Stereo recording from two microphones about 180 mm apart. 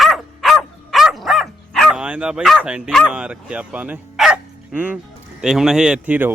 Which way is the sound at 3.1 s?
5° right (ahead or behind).